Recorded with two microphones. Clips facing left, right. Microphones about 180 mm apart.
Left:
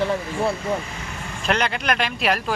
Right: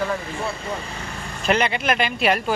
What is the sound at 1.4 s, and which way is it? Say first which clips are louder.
Speech: right 2 dB; centre (ahead or behind).